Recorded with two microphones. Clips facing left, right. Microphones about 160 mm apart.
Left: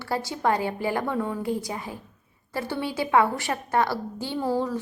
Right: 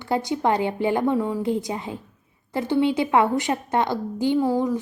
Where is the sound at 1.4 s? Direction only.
20° right (ahead or behind).